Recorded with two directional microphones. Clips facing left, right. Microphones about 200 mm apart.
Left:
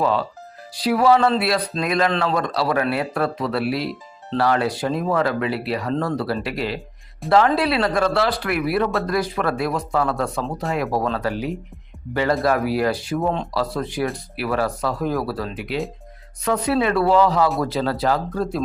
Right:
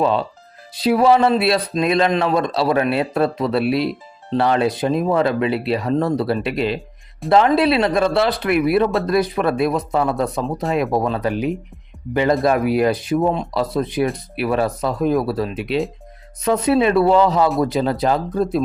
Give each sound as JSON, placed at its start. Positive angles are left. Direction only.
{"t": 0.0, "sound": "speech", "side_deg": -20}